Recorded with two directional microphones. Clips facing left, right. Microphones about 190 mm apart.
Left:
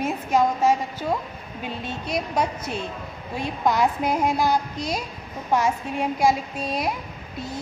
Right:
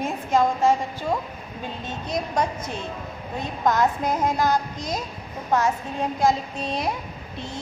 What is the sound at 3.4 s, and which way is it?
A woman's voice, 10° left (ahead or behind).